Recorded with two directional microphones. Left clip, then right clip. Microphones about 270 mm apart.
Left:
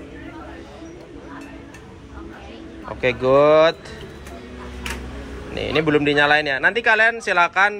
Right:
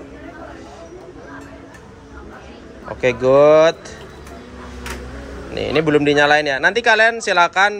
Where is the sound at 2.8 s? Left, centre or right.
Centre.